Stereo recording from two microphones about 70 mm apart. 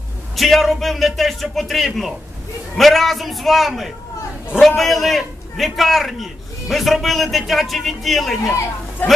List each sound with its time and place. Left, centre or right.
0.4 s a man's voice: centre
9.0 s speech: left